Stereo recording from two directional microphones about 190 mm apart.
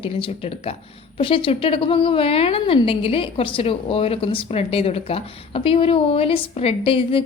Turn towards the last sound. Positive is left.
turn(degrees=30)  # may be behind; listen again after turning